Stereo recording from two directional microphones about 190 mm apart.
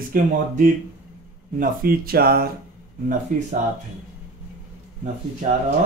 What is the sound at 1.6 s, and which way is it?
Speech, 50° right (ahead or behind).